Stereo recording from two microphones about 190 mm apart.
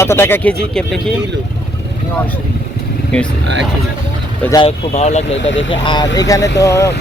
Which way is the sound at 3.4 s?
65° right (ahead or behind).